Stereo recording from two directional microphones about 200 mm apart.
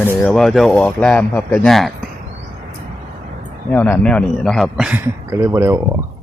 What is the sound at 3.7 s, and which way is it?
A man's voice, 10° left (ahead or behind).